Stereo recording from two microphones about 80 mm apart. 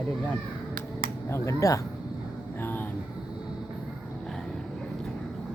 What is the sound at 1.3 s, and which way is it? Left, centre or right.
Speech, left.